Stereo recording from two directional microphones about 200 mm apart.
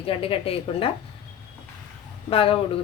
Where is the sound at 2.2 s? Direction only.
25° left (ahead or behind).